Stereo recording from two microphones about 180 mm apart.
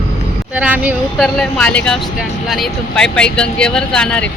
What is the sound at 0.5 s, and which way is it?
Speech, 5° right (ahead or behind).